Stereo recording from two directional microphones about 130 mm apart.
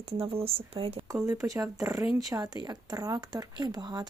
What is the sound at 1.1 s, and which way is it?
Speech, 25° right (ahead or behind).